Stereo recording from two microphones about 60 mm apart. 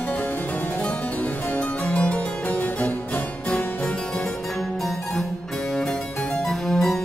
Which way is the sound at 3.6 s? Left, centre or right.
Left.